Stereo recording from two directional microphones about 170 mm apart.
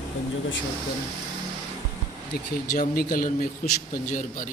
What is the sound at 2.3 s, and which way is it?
A man's voice, 60° left (ahead or behind).